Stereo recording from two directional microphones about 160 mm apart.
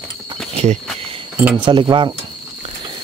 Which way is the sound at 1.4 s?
10° right (ahead or behind).